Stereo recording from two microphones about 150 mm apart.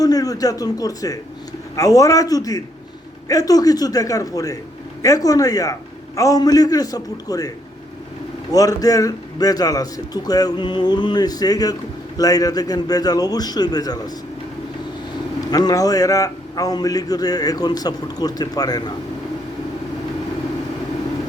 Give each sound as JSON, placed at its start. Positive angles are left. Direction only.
{"t": 0.0, "sound": "a man's voice", "side_deg": 25}
{"t": 8.5, "sound": "a man's voice", "side_deg": 25}
{"t": 15.4, "sound": "a man's voice", "side_deg": 25}